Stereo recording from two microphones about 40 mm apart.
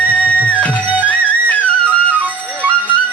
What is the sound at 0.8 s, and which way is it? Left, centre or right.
Music, right.